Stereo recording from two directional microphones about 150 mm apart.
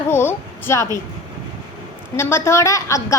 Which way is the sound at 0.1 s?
15° left (ahead or behind).